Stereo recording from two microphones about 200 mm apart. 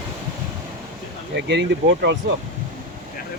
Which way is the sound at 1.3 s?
60° right (ahead or behind).